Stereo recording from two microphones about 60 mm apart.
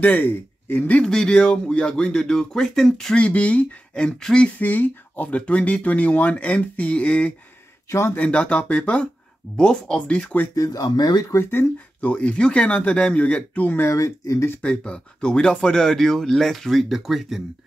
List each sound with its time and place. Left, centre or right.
0.0 s speech: left
1.0 s speech: centre
3.2 s speech: left
4.6 s speech: left
7.9 s speech: left
8.2 s speech: left
10.5 s speech: left
11.3 s speech: left
12.0 s speech: left
13.8 s speech: left
14.6 s speech: centre